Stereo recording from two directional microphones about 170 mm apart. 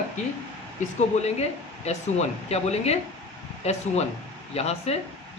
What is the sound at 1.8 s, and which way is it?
Speech, 40° left (ahead or behind).